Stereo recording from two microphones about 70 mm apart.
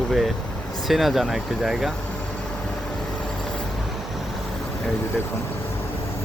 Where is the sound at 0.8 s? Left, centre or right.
Centre.